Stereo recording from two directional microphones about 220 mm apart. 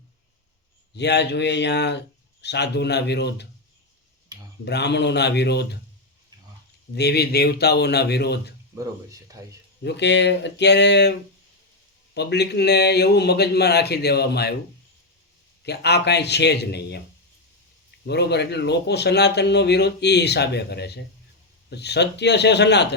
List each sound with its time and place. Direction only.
0.9 s speech: 50° left (ahead or behind)
4.6 s speech: 50° left (ahead or behind)
6.9 s speech: 50° left (ahead or behind)
8.7 s speech: 15° right (ahead or behind)
9.8 s speech: 50° left (ahead or behind)
12.1 s speech: 50° left (ahead or behind)
15.6 s speech: 50° left (ahead or behind)
18.0 s speech: 50° left (ahead or behind)